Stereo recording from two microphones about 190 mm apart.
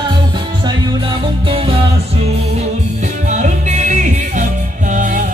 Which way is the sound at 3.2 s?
40° right (ahead or behind).